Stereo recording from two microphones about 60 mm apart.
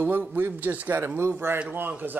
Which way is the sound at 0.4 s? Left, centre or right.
Right.